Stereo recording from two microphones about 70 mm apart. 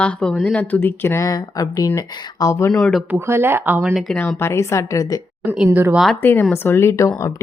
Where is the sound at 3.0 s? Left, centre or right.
Right.